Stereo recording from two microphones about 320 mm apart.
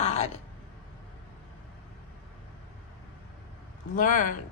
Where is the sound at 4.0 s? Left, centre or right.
Left.